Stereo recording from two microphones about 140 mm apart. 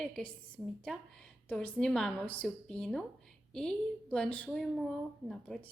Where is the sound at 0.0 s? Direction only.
10° left (ahead or behind).